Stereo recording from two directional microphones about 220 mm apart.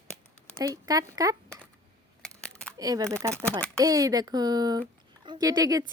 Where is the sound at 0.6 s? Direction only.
15° right (ahead or behind).